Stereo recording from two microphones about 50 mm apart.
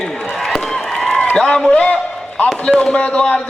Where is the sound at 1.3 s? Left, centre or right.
Centre.